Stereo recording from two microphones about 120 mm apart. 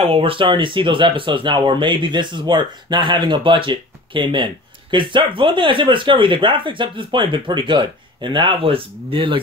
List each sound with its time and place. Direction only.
0.0 s speech: 50° right (ahead or behind)